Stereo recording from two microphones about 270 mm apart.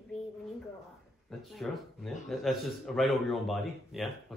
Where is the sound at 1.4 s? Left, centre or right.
Centre.